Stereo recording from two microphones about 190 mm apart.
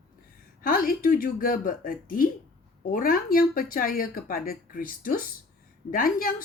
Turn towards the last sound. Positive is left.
turn(degrees=50)  # may be behind; listen again after turning